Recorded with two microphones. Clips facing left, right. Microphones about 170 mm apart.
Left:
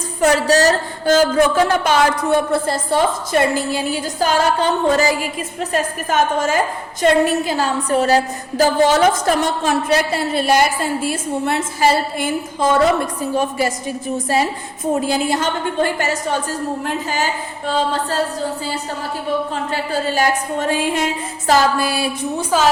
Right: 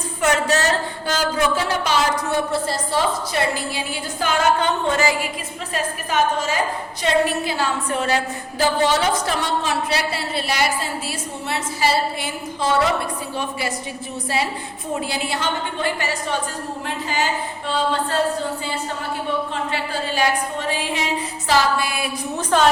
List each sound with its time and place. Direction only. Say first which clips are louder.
0.2 s a woman's voice: left 5 dB; 35° left (ahead or behind)
19.7 s a woman's voice: left 8 dB; 45° left (ahead or behind)
22.4 s a woman's voice: even; 5° left (ahead or behind)